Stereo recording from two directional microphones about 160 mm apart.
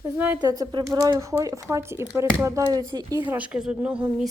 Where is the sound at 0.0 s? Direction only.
10° right (ahead or behind).